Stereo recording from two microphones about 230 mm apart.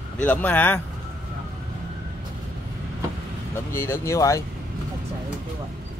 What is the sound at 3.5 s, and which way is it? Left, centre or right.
Speech, centre.